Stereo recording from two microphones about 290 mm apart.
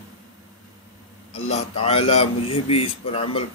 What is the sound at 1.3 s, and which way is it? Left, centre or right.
Speech, left.